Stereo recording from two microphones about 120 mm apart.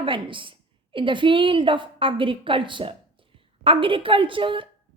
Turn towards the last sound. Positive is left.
turn(degrees=-45)  # may be behind; listen again after turning